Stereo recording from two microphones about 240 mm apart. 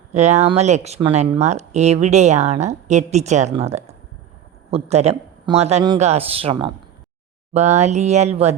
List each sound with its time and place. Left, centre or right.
0.1 s speech: right